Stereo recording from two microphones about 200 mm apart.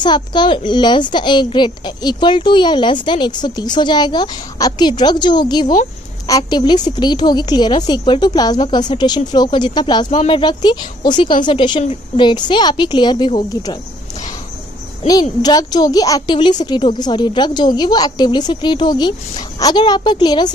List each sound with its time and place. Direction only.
0.0 s a child's voice: 20° left (ahead or behind)
15.0 s a child's voice: 20° left (ahead or behind)